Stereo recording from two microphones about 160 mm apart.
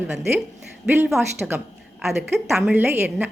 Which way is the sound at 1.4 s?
5° right (ahead or behind).